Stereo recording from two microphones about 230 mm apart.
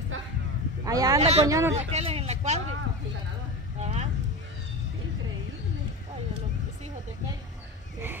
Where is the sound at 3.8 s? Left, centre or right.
Right.